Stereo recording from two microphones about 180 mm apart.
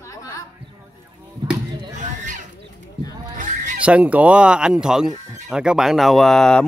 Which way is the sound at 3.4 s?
45° right (ahead or behind).